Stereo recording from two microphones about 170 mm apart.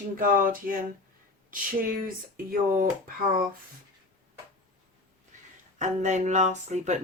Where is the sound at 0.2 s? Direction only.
55° right (ahead or behind).